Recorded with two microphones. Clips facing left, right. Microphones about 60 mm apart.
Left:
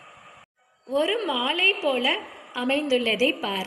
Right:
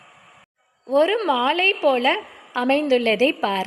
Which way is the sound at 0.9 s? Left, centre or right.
Right.